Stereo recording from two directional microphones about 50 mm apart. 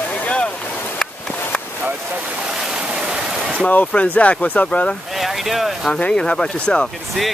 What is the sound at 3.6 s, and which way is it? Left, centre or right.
Speech, left.